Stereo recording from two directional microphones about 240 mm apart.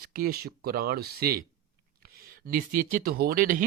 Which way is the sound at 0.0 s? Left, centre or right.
Right.